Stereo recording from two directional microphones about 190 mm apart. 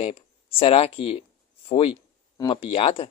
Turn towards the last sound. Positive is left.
turn(degrees=30)  # may be behind; listen again after turning